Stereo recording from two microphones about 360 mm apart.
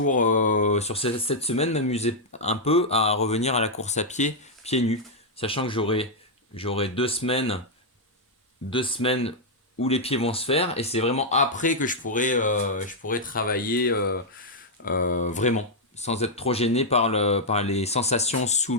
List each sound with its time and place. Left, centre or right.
0.0 s speech: left
8.7 s speech: centre